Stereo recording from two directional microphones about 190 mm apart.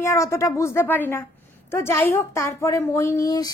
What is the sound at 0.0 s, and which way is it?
A woman's voice, 15° left (ahead or behind).